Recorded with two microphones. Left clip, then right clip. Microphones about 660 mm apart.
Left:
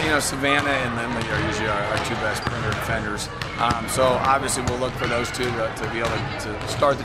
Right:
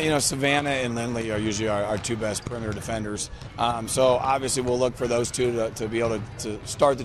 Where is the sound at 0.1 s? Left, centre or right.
Right.